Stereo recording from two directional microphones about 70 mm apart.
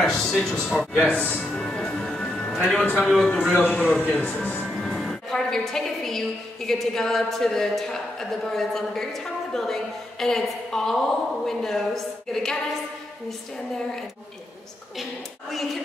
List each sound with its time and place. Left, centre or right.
0.0 s speech: centre
1.6 s music: centre
2.5 s a woman's voice: centre
3.5 s a man's voice: left; by 12.5 s centre
15.5 s a woman's voice: centre